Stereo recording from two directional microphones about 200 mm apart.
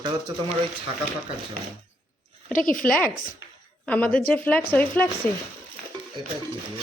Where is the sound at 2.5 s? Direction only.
45° left (ahead or behind).